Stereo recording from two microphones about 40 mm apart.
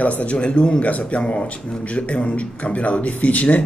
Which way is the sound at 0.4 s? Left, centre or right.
Left.